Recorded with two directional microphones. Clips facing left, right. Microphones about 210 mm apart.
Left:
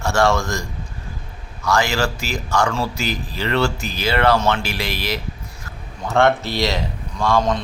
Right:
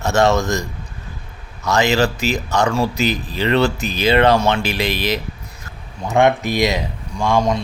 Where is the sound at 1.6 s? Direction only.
20° right (ahead or behind).